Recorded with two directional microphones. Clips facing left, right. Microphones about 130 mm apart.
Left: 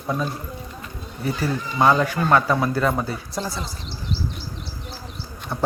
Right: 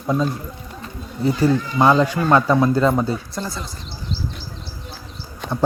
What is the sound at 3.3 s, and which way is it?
Speech, 10° left (ahead or behind).